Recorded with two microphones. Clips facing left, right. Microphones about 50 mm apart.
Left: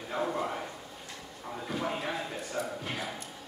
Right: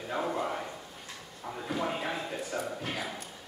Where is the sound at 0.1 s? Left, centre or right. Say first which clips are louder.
Even; centre.